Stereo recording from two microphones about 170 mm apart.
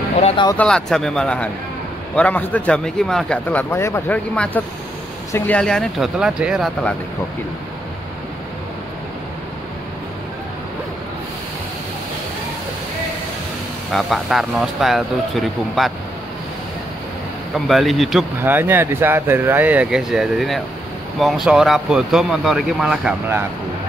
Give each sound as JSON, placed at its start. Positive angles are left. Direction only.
{"t": 0.6, "sound": "a man's voice", "side_deg": 5}
{"t": 13.9, "sound": "speech", "side_deg": 0}
{"t": 17.6, "sound": "speech", "side_deg": 0}
{"t": 18.4, "sound": "speech", "side_deg": -10}